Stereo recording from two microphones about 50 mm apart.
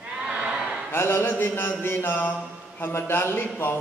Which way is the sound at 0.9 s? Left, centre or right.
Left.